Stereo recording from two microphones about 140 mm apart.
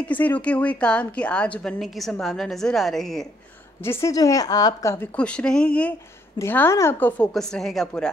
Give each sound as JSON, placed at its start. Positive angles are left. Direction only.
{"t": 0.0, "sound": "a woman's voice", "side_deg": 10}
{"t": 3.8, "sound": "a woman's voice", "side_deg": 20}
{"t": 7.3, "sound": "a woman's voice", "side_deg": 0}